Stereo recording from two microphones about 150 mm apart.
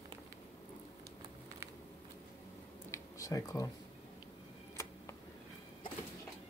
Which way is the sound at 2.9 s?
25° left (ahead or behind).